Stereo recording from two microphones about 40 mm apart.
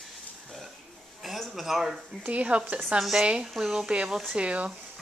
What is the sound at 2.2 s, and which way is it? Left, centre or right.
Speech, right.